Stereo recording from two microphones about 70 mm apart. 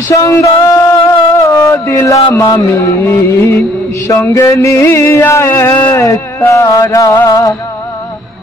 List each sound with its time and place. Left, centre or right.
0.1 s music: left
4.1 s music: left
5.9 s music: left